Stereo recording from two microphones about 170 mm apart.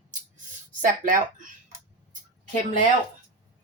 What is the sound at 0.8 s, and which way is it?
Speech, 50° right (ahead or behind).